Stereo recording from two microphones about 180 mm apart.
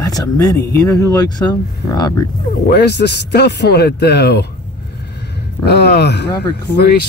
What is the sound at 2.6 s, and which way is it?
A man's voice, 70° left (ahead or behind).